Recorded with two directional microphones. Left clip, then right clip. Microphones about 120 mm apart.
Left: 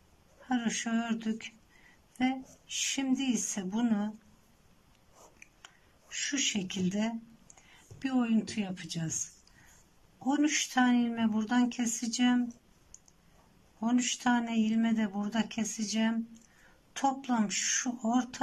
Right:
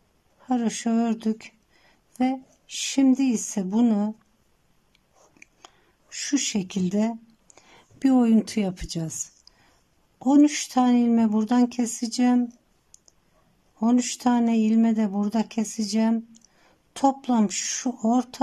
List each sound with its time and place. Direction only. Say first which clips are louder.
0.5 s speech: right 7 dB; 40° right (ahead or behind)
5.4 s a sound: right 8 dB; 45° right (ahead or behind)
8.0 s a woman's voice: right 11 dB; 60° right (ahead or behind); by 12.4 s 45° right (ahead or behind)
12.9 s clicking: right 2 dB; 45° right (ahead or behind)
13.7 s speech: right 7 dB; 45° right (ahead or behind)